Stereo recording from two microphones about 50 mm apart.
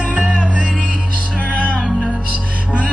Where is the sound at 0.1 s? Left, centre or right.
Centre.